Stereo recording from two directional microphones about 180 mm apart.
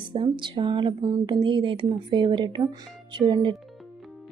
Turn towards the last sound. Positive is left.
turn(degrees=-25)  # may be behind; listen again after turning